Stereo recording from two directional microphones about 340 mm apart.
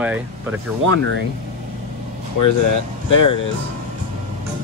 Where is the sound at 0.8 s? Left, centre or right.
Right.